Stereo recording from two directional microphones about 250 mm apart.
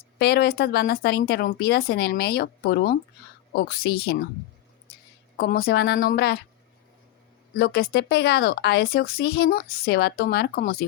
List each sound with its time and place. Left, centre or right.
0.2 s speech: left
5.4 s speech: left
7.5 s speech: left